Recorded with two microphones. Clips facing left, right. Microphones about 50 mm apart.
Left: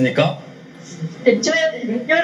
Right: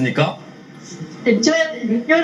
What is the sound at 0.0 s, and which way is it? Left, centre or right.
Speech, right.